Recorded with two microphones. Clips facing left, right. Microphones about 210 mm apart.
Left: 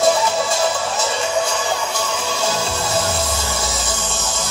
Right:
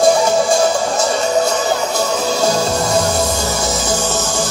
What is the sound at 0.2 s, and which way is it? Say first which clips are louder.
Music: right 6 dB; 45° right (ahead or behind).